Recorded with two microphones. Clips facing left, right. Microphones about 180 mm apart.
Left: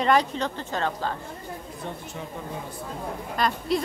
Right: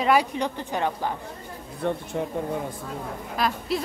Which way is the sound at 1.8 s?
60° right (ahead or behind).